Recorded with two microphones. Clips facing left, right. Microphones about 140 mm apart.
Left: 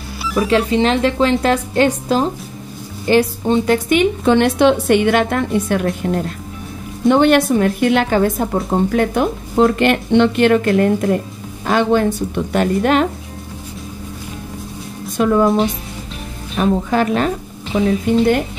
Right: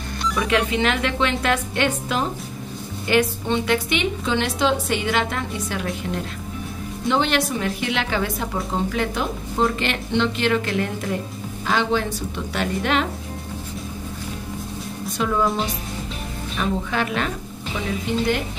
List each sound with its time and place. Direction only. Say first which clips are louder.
0.4 s a woman's voice: left 7 dB; 35° left (ahead or behind)
15.1 s a woman's voice: left 8 dB; 50° left (ahead or behind)